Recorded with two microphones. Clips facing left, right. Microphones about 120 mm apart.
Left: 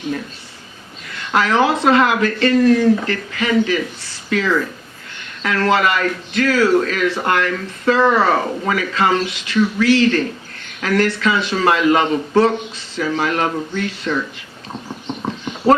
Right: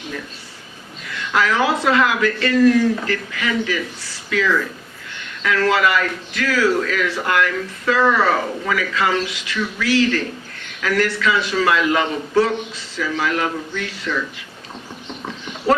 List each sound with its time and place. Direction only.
1.3 s a man's voice: 30° left (ahead or behind)